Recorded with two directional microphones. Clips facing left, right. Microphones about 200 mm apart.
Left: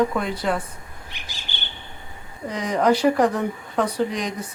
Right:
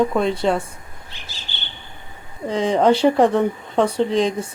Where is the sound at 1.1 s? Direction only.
15° left (ahead or behind).